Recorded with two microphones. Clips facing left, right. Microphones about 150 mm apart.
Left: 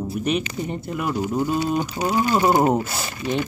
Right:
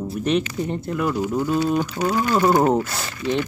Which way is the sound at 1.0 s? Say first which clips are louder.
Even; 10° left (ahead or behind).